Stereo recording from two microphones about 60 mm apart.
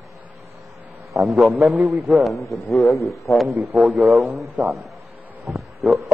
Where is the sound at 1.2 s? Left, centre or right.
Centre.